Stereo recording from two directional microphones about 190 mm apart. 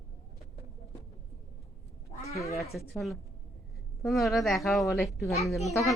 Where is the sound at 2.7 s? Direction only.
Centre (ahead or behind).